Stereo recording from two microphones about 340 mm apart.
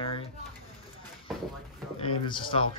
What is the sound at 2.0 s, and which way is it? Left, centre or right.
Speech, centre.